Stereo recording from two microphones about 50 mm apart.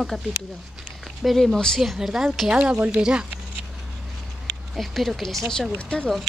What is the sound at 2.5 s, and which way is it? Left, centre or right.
Speech, right.